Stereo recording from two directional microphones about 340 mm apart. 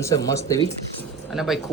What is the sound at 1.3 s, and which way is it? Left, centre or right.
Speech, centre.